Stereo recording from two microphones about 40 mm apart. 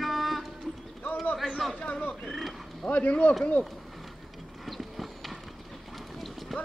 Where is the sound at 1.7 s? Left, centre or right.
Left.